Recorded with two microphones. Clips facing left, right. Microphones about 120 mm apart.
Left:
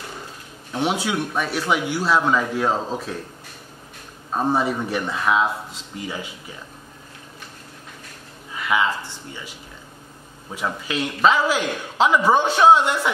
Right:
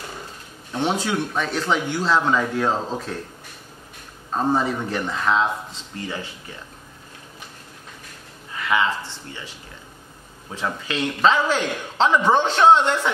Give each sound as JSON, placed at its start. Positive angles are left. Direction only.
{"t": 0.7, "sound": "a man's voice", "side_deg": 10}
{"t": 4.3, "sound": "a man's voice", "side_deg": 10}
{"t": 8.5, "sound": "a man's voice", "side_deg": 10}
{"t": 10.5, "sound": "a man's voice", "side_deg": 10}